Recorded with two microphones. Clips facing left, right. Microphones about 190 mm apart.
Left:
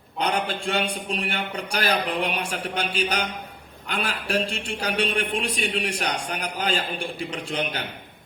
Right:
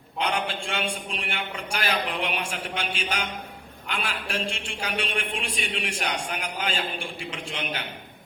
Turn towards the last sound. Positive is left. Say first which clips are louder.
# left 4 dB
turn(degrees=40)  # may be behind; listen again after turning